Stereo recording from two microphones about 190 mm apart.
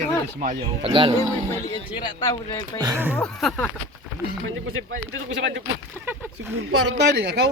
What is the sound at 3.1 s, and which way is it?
Speech, 5° left (ahead or behind).